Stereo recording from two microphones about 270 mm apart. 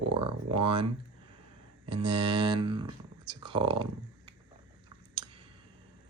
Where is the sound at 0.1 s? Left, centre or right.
Right.